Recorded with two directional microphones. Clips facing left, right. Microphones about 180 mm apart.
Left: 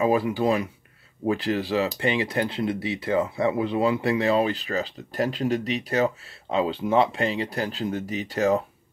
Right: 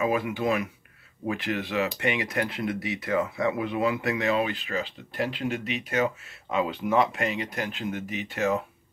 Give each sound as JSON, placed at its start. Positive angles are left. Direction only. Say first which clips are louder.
{"t": 0.0, "sound": "speech", "louder": "left 4 dB", "side_deg": 35}